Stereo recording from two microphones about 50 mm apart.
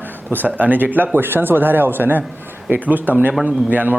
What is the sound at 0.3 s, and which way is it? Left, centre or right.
Speech, right.